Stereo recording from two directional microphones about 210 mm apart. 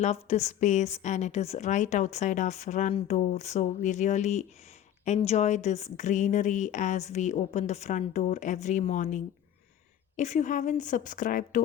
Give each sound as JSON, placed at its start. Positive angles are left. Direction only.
{"t": 0.0, "sound": "a woman's voice", "side_deg": 30}